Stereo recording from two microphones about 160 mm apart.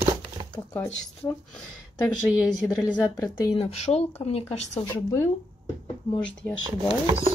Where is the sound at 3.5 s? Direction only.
40° left (ahead or behind).